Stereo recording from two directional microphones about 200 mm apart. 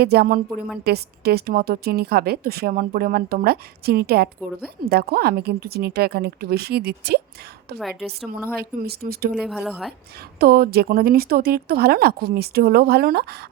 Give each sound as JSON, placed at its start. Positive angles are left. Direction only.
{"t": 0.0, "sound": "a woman's voice", "side_deg": -50}
{"t": 7.8, "sound": "a woman's voice", "side_deg": 0}
{"t": 8.5, "sound": "a woman's voice", "side_deg": -50}
{"t": 9.3, "sound": "a woman's voice", "side_deg": 0}
{"t": 10.3, "sound": "a woman's voice", "side_deg": -50}